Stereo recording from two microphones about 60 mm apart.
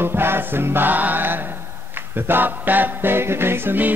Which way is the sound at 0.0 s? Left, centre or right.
Right.